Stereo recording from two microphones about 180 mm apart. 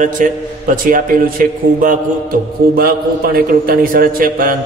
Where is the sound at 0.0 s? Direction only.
45° right (ahead or behind).